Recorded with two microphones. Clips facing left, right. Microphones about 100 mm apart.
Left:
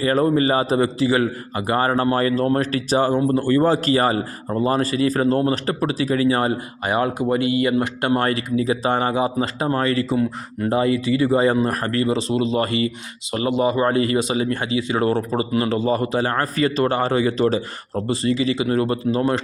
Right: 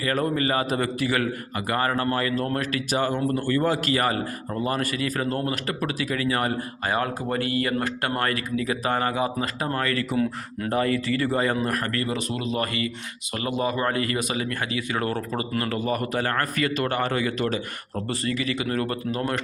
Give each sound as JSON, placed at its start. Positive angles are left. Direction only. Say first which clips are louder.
{"t": 0.0, "sound": "speech", "louder": "left 7 dB", "side_deg": 30}